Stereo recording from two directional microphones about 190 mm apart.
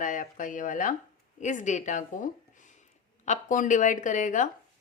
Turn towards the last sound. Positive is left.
turn(degrees=40)  # may be behind; listen again after turning